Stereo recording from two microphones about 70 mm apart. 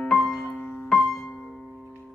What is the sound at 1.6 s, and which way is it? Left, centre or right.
Music, centre.